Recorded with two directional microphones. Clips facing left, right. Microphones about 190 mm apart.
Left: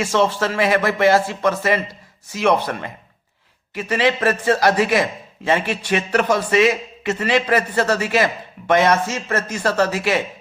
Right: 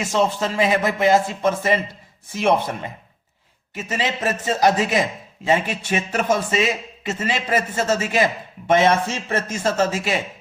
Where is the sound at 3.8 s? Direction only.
20° right (ahead or behind).